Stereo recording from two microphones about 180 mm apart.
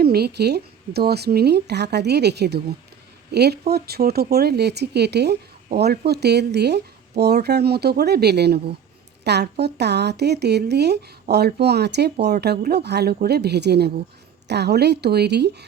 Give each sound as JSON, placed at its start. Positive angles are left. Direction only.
{"t": 0.0, "sound": "speech", "side_deg": -60}